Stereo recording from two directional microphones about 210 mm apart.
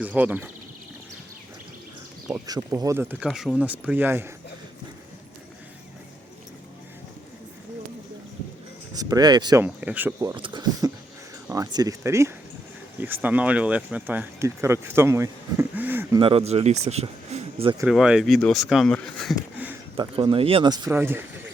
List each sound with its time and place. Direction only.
0.0 s speech: 10° right (ahead or behind)
2.2 s speech: 15° right (ahead or behind)
9.0 s speech: 20° right (ahead or behind)
9.6 s speech: 5° right (ahead or behind)
16.2 s speech: 30° right (ahead or behind)
17.8 s speech: 5° right (ahead or behind)
20.0 s speech: 25° right (ahead or behind)